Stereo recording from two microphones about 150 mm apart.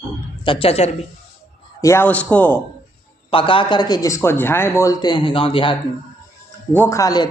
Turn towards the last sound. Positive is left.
turn(degrees=25)  # may be behind; listen again after turning